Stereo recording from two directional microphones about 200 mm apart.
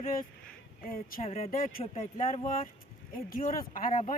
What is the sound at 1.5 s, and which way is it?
Speech, 45° left (ahead or behind).